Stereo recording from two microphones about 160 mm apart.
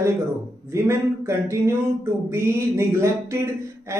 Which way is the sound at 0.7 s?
15° right (ahead or behind).